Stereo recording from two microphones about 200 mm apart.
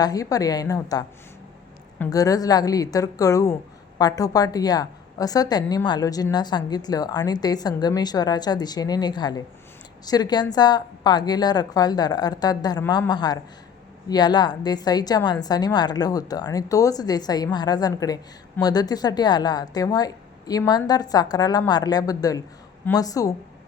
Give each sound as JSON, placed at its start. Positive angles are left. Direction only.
{"t": 0.0, "sound": "a woman's voice", "side_deg": 15}